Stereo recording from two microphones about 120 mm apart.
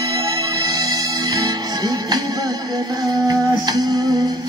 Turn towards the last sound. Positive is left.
turn(degrees=-35)  # may be behind; listen again after turning